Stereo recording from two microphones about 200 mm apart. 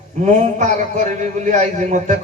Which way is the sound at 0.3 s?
35° right (ahead or behind).